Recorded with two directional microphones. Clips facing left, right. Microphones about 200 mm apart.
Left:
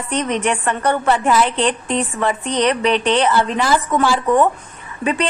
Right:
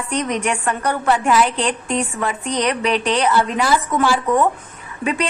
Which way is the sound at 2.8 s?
30° left (ahead or behind).